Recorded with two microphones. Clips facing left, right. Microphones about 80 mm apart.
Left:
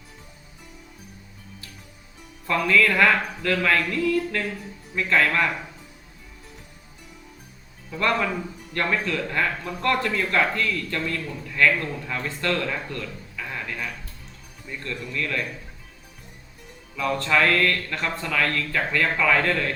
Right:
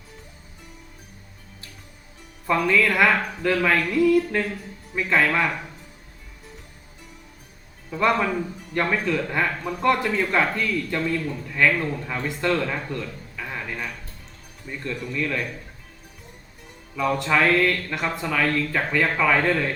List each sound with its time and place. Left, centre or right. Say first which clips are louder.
2.5 s speech: even; centre
7.9 s a man's voice: right 2 dB; centre
12.9 s a sound: right 2 dB; centre
14.7 s speech: right 2 dB; centre
17.0 s speech: right 1 dB; centre